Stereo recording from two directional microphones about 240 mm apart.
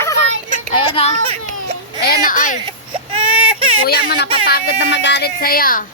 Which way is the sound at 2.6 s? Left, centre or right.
Right.